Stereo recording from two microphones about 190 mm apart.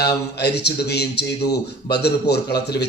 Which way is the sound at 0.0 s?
60° left (ahead or behind).